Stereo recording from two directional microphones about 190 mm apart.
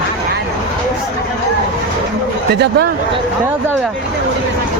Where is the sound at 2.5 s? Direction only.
60° right (ahead or behind).